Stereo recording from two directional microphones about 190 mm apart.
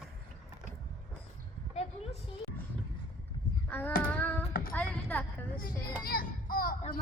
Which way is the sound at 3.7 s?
10° left (ahead or behind).